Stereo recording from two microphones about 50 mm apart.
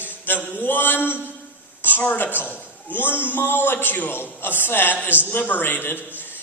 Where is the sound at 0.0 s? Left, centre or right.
Left.